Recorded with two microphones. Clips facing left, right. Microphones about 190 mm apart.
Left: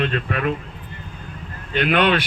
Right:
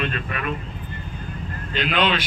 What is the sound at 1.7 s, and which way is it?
Speech, 60° left (ahead or behind).